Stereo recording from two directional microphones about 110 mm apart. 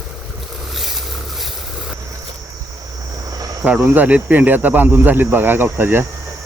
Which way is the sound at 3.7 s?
15° right (ahead or behind).